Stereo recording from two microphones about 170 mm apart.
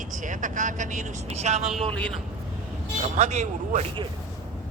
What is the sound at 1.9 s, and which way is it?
Speech, 5° left (ahead or behind).